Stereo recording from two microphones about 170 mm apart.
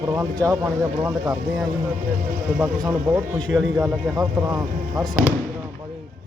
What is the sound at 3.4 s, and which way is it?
Speech, centre (ahead or behind).